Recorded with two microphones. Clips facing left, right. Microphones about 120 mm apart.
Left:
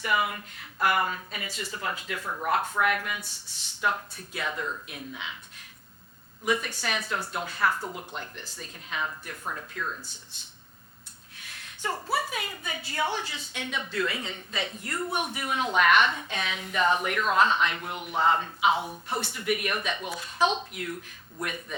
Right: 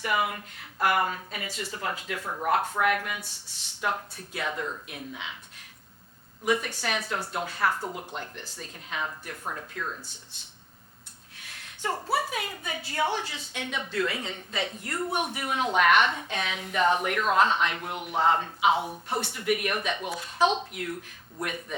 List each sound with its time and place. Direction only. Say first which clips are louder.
0.0 s speech: even; 50° right (ahead or behind)
1.6 s speech: even; 40° right (ahead or behind)
2.2 s speech: right 1 dB; 35° right (ahead or behind)
4.9 s speech: even; 50° right (ahead or behind)
6.4 s speech: right 1 dB; 50° right (ahead or behind)
7.0 s speech: right 1 dB; 40° right (ahead or behind)
10.3 s a sound: even; 70° right (ahead or behind)
12.3 s speech: right 1 dB; 50° right (ahead or behind)